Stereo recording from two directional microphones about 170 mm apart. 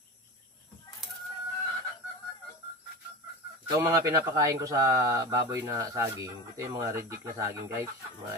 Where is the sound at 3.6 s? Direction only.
20° right (ahead or behind).